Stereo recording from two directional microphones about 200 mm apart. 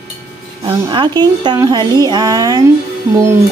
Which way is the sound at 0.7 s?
25° right (ahead or behind).